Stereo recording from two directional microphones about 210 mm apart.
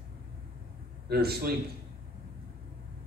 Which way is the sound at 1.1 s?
50° right (ahead or behind).